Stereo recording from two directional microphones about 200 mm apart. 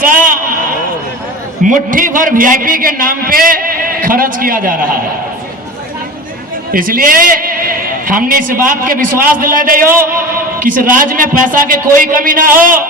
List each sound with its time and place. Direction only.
0.0 s a sound: 45° right (ahead or behind)
1.6 s a man's voice: 40° right (ahead or behind)
6.7 s a man's voice: 45° right (ahead or behind)